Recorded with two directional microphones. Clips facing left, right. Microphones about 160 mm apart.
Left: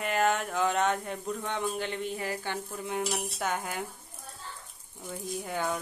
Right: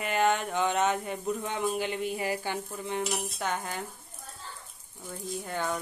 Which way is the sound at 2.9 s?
10° left (ahead or behind).